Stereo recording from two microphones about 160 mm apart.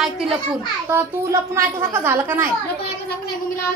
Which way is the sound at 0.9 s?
15° right (ahead or behind).